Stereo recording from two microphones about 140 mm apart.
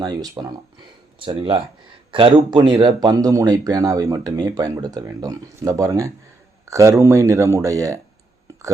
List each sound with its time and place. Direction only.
0.0 s speech: 25° right (ahead or behind)
1.4 s speech: 40° right (ahead or behind); by 8.0 s 20° right (ahead or behind)